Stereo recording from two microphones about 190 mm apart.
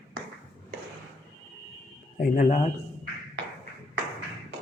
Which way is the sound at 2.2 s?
45° left (ahead or behind).